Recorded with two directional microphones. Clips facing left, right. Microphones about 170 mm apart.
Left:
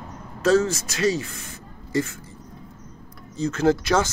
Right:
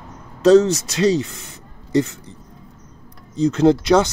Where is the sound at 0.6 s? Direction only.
20° right (ahead or behind).